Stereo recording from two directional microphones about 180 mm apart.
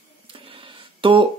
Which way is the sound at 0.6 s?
30° right (ahead or behind).